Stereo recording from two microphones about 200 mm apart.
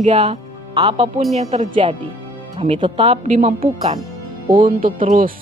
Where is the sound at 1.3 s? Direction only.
35° right (ahead or behind).